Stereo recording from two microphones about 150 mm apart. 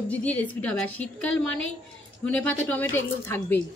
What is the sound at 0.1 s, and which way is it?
A woman's voice, 10° left (ahead or behind).